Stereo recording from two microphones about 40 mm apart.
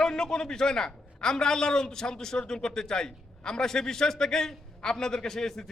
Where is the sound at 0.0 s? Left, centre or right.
Centre.